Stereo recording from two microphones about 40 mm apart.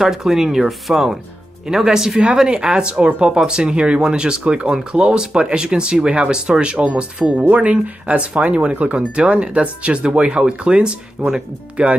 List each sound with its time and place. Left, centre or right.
0.0 s speech: centre; by 3.3 s right
3.3 s speech: centre